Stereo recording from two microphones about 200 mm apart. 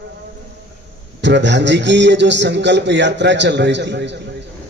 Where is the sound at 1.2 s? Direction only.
60° right (ahead or behind).